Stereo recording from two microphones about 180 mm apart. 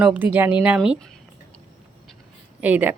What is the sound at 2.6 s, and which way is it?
Speech, 10° right (ahead or behind).